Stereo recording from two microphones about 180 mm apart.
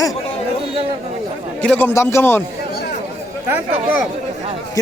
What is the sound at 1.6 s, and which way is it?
Speech, 10° left (ahead or behind).